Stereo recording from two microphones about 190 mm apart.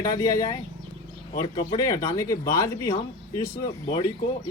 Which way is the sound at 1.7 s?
20° left (ahead or behind).